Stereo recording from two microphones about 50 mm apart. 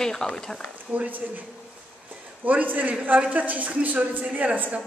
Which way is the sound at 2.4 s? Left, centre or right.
Right.